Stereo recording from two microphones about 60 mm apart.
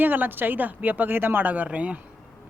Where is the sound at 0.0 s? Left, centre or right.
Right.